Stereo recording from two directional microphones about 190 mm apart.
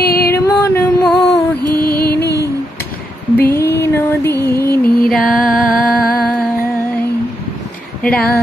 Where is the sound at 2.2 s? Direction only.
60° left (ahead or behind).